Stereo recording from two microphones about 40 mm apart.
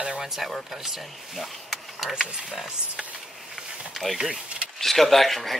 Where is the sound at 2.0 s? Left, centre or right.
Centre.